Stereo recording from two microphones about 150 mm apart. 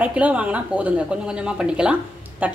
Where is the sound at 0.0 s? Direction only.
10° right (ahead or behind).